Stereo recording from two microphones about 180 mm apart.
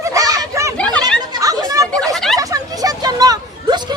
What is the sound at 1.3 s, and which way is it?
Chatter, 20° right (ahead or behind).